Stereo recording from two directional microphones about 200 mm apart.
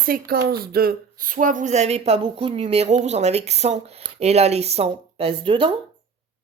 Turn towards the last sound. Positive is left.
turn(degrees=-25)  # may be behind; listen again after turning